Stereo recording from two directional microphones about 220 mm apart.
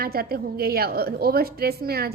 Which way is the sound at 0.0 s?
45° right (ahead or behind).